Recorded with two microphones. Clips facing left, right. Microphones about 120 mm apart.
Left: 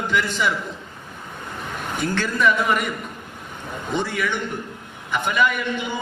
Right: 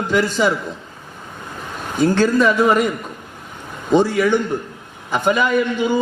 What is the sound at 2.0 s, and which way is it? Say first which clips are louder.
Speech: right 8 dB; 35° right (ahead or behind).